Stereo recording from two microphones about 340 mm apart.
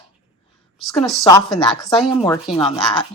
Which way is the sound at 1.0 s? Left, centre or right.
Centre.